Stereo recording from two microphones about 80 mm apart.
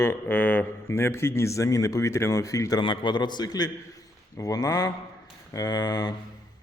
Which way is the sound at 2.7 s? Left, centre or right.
Left.